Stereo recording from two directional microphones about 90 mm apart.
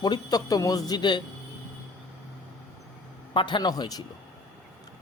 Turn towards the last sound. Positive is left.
turn(degrees=45)  # may be behind; listen again after turning